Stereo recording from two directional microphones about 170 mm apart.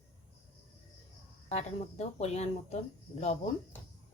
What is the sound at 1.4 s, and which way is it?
Speech, 40° left (ahead or behind).